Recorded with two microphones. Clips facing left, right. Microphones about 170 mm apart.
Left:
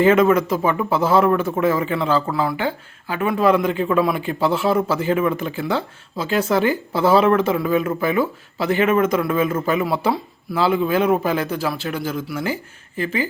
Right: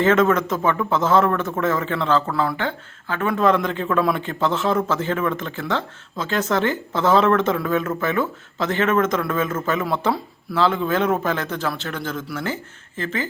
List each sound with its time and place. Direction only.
0.0 s speech: 10° left (ahead or behind)